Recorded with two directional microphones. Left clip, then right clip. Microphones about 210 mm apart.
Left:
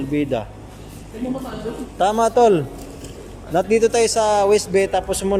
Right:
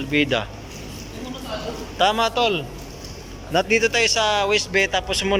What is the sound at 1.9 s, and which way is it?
Speech, 20° left (ahead or behind).